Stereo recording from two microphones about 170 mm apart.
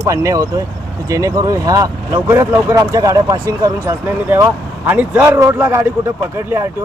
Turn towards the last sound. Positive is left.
turn(degrees=-15)  # may be behind; listen again after turning